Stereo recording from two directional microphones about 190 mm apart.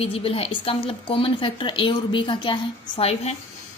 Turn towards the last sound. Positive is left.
turn(degrees=30)  # may be behind; listen again after turning